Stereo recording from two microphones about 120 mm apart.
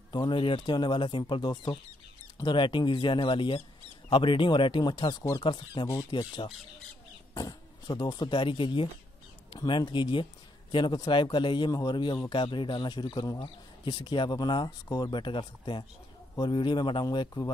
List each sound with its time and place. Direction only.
0.1 s a man's voice: 40° left (ahead or behind)